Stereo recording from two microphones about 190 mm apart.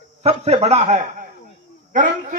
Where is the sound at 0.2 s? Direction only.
35° right (ahead or behind).